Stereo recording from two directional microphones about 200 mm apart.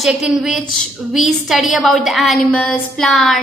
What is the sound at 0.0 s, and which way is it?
A woman's voice, centre (ahead or behind).